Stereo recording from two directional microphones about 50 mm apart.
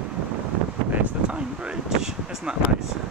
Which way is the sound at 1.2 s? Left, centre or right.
Centre.